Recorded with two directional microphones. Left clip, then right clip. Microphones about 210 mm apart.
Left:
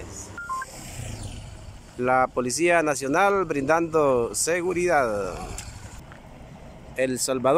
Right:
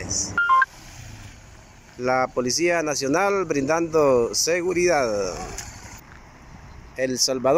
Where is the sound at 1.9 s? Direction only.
Centre (ahead or behind).